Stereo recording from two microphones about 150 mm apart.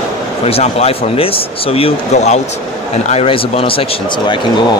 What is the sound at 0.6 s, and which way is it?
Speech, 45° left (ahead or behind).